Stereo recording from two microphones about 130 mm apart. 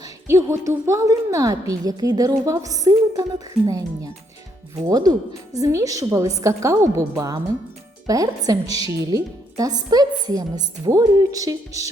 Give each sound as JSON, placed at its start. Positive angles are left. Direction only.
{"t": 0.3, "sound": "a woman's voice", "side_deg": -20}